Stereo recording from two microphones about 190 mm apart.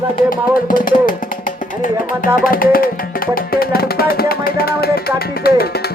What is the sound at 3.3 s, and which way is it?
Music, 50° left (ahead or behind).